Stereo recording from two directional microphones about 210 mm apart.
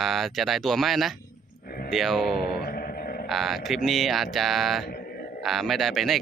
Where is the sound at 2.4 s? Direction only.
50° left (ahead or behind).